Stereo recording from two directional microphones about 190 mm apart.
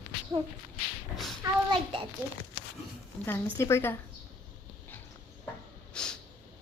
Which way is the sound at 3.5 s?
15° left (ahead or behind).